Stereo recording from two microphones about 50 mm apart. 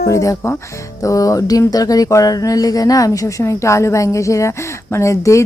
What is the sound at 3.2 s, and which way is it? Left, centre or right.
Speech, left.